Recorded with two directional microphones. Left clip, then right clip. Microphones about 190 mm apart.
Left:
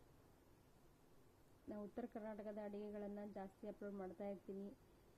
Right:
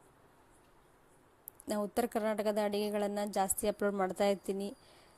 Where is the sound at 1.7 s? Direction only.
55° right (ahead or behind).